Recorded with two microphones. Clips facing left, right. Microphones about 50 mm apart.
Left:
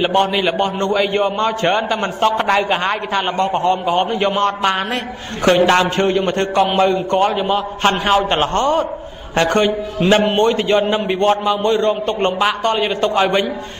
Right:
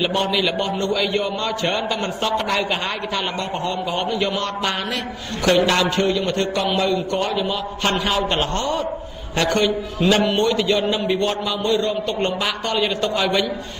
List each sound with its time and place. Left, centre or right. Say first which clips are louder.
0.0 s a man's voice: left 5 dB; left